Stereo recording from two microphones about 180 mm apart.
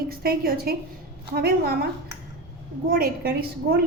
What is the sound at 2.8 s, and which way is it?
Speech, 55° right (ahead or behind).